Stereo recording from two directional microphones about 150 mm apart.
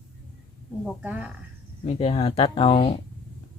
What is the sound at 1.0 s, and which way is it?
Speech, 10° right (ahead or behind).